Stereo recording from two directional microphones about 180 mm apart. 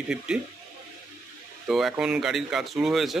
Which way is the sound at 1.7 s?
Centre (ahead or behind).